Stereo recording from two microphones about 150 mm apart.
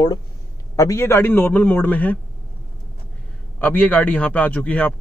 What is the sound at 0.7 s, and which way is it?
A man's voice, 20° left (ahead or behind).